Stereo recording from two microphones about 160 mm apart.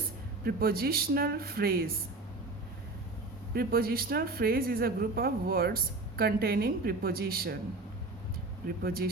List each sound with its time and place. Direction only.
0.4 s a woman's voice: 70° right (ahead or behind)
3.5 s a woman's voice: 70° right (ahead or behind)
8.6 s a woman's voice: 70° right (ahead or behind)